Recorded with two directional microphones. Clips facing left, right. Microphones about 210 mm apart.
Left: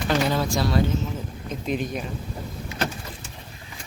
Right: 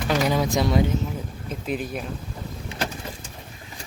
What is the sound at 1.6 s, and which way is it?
Speech, 5° right (ahead or behind).